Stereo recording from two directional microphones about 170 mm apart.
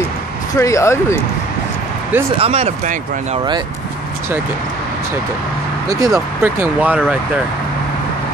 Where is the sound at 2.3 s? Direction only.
35° right (ahead or behind).